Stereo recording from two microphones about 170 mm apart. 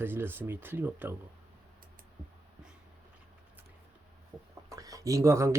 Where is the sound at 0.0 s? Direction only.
15° right (ahead or behind).